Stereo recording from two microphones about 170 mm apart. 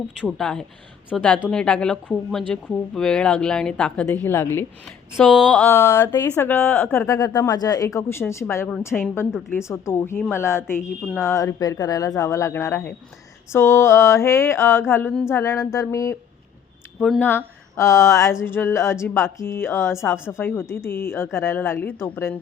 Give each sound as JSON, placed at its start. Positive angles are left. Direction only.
{"t": 0.3, "sound": "a woman's voice", "side_deg": 5}
{"t": 20.1, "sound": "a woman's voice", "side_deg": -5}
{"t": 20.4, "sound": "speech", "side_deg": 10}